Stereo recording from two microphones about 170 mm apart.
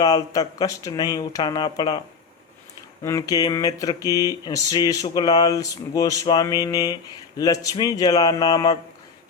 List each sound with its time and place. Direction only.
0.0 s speech: 20° left (ahead or behind)
3.0 s speech: 20° left (ahead or behind)